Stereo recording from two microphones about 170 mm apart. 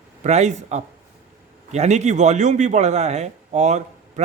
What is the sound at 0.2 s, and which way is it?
Speech, 40° right (ahead or behind).